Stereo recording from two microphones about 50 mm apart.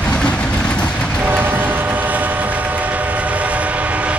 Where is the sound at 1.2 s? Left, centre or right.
Right.